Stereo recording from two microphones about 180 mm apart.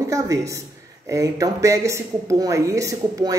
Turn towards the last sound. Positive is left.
turn(degrees=-20)  # may be behind; listen again after turning